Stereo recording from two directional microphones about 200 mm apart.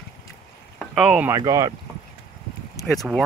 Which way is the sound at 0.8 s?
5° right (ahead or behind).